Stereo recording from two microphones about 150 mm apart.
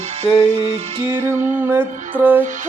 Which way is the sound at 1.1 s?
15° right (ahead or behind).